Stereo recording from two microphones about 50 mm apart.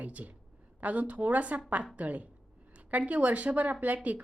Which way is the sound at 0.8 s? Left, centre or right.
Right.